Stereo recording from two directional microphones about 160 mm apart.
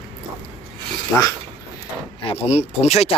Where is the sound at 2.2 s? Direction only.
40° left (ahead or behind).